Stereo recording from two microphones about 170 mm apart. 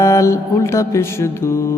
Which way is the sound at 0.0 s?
15° left (ahead or behind).